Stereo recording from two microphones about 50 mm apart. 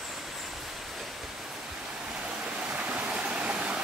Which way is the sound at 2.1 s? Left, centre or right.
Centre.